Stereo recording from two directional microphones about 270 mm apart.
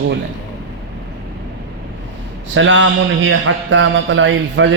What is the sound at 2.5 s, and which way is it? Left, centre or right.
A man's voice, right.